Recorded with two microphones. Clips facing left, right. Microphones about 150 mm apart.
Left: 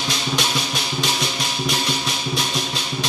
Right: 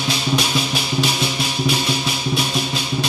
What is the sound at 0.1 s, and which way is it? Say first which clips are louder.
Music: right 4 dB; 5° right (ahead or behind).